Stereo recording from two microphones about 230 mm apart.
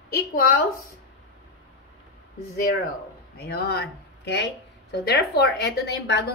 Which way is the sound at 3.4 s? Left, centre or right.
Left.